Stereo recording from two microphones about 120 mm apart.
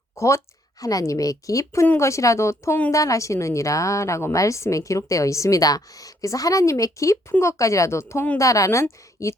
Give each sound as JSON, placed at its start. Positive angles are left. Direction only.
{"t": 0.2, "sound": "a woman's voice", "side_deg": 25}